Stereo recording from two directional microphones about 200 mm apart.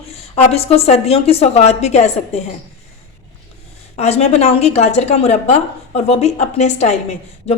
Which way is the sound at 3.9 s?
30° left (ahead or behind).